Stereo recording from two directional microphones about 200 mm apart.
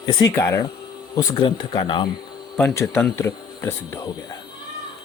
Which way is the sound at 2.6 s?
10° left (ahead or behind).